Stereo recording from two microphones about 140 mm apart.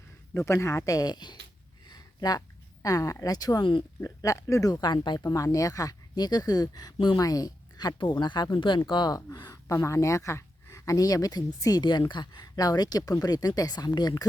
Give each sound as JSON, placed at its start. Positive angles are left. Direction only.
{"t": 0.3, "sound": "speech", "side_deg": 20}
{"t": 1.9, "sound": "a sound", "side_deg": 30}
{"t": 2.8, "sound": "speech", "side_deg": 25}
{"t": 4.0, "sound": "speech", "side_deg": 25}